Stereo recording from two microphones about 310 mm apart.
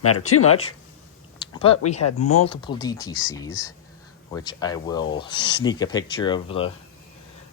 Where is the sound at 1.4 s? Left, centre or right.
Centre.